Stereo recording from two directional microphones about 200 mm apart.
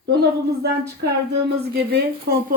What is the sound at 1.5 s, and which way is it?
Speech, 55° right (ahead or behind).